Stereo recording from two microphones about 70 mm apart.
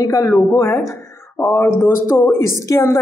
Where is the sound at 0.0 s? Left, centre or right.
Left.